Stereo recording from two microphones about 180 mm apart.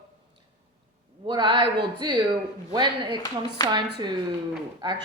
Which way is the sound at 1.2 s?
25° right (ahead or behind).